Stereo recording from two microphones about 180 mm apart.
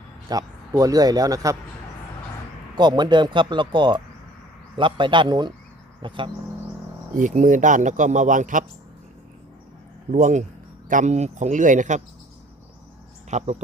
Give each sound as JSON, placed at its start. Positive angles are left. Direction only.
{"t": 0.3, "sound": "a man's voice", "side_deg": -20}
{"t": 2.7, "sound": "a man's voice", "side_deg": -25}
{"t": 7.1, "sound": "speech", "side_deg": -45}
{"t": 10.1, "sound": "speech", "side_deg": -45}
{"t": 13.3, "sound": "speech", "side_deg": -35}